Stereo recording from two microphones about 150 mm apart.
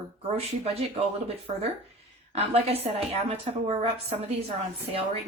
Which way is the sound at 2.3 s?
45° right (ahead or behind).